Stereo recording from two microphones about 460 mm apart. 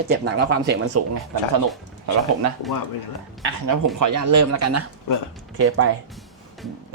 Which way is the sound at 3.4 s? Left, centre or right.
Right.